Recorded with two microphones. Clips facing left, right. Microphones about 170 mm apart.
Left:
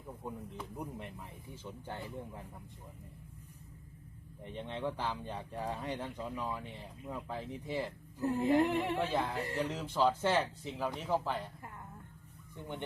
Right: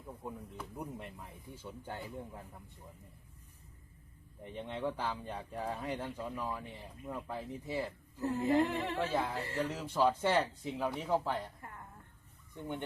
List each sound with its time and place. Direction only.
0.2 s speech: centre (ahead or behind)
4.5 s speech: 10° right (ahead or behind)
8.2 s speech: 15° left (ahead or behind)
9.6 s speech: 10° right (ahead or behind)
12.5 s speech: 15° right (ahead or behind)